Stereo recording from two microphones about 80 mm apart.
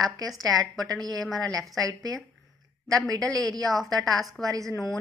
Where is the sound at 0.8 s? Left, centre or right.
Right.